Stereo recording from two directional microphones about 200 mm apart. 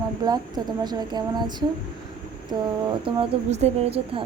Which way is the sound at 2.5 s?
20° right (ahead or behind).